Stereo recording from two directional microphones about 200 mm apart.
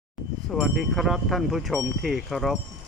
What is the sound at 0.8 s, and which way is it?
Wind chime, centre (ahead or behind).